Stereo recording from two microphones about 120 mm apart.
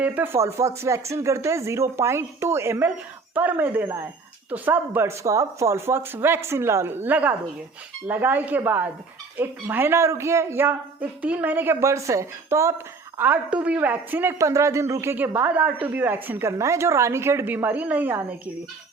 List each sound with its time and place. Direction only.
0.0 s speech: 15° right (ahead or behind)
13.1 s speech: 15° right (ahead or behind)